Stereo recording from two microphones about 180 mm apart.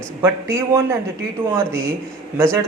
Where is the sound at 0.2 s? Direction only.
15° right (ahead or behind).